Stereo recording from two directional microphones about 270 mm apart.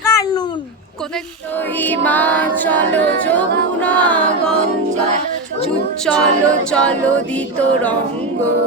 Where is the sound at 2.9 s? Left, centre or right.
Right.